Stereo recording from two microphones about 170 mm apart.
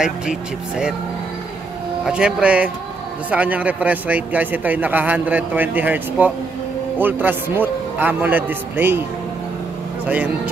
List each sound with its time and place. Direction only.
0.0 s speech: 5° right (ahead or behind)
2.0 s a man's voice: 5° right (ahead or behind)
10.0 s a man's voice: 10° right (ahead or behind)